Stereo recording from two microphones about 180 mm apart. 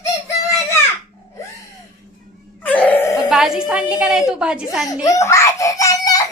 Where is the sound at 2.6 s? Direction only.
10° left (ahead or behind).